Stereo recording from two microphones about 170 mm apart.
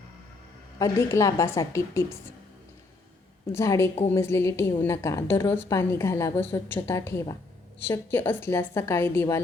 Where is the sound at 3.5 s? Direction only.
15° left (ahead or behind).